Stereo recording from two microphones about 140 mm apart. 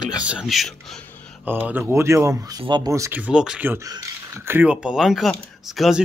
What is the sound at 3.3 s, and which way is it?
A woman's voice, 5° right (ahead or behind).